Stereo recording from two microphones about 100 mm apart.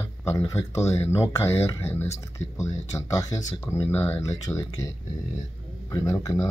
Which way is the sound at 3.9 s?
25° left (ahead or behind).